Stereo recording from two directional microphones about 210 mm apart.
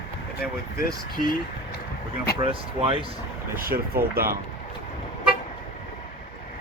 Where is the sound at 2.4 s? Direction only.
25° right (ahead or behind).